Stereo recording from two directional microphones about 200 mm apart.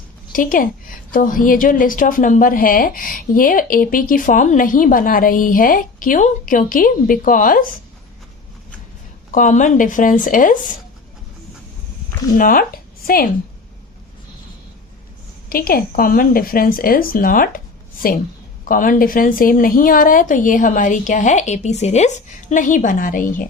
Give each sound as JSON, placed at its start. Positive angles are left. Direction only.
{"t": 0.3, "sound": "a woman's voice", "side_deg": 45}
{"t": 9.3, "sound": "a woman's voice", "side_deg": 40}
{"t": 12.4, "sound": "speech", "side_deg": 45}
{"t": 15.4, "sound": "a woman's voice", "side_deg": 45}
{"t": 18.6, "sound": "a woman's voice", "side_deg": 40}